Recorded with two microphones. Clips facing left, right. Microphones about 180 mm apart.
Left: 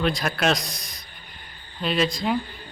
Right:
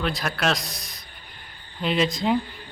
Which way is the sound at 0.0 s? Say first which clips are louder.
Left 2 dB; centre (ahead or behind).